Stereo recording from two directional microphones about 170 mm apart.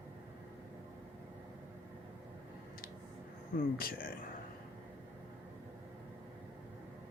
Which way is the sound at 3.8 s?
60° left (ahead or behind).